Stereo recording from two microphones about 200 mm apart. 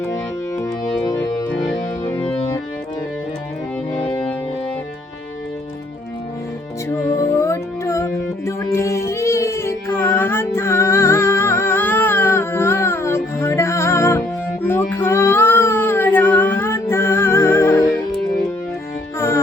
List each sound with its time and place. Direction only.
0.6 s music: 15° left (ahead or behind)
3.9 s music: 30° left (ahead or behind)
7.2 s music: 15° left (ahead or behind)